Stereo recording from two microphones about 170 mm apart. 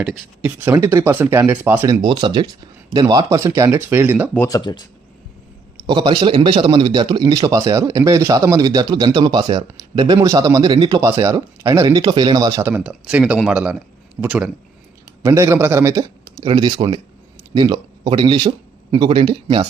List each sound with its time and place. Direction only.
0.0 s speech: 5° right (ahead or behind)
0.6 s speech: 15° right (ahead or behind)
4.4 s speech: 20° left (ahead or behind)
5.8 s a man's voice: 25° right (ahead or behind)
11.1 s a man's voice: 15° right (ahead or behind)